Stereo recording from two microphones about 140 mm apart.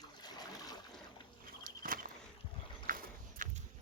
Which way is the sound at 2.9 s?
75° right (ahead or behind).